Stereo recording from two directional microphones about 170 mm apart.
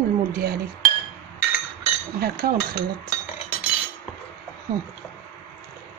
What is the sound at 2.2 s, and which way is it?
Speech, 65° right (ahead or behind).